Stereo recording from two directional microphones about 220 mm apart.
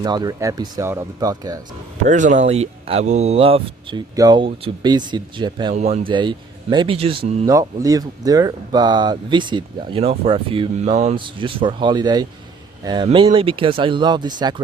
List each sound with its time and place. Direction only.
0.0 s speech: 15° right (ahead or behind)
2.0 s speech: 35° right (ahead or behind)
5.7 s speech: 30° right (ahead or behind)